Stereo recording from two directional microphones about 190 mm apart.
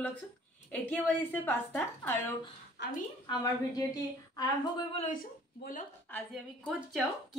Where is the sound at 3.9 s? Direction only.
20° left (ahead or behind).